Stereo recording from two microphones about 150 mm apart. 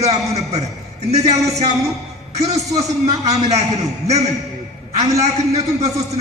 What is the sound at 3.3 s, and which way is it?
A man's voice, 45° right (ahead or behind).